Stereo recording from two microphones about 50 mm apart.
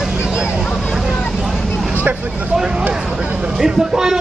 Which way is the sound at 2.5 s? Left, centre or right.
Centre.